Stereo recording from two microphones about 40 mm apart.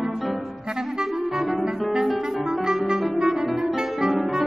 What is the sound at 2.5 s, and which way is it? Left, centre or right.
Music, centre.